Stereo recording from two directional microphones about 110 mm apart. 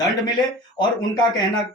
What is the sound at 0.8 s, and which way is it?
Speech, 40° left (ahead or behind).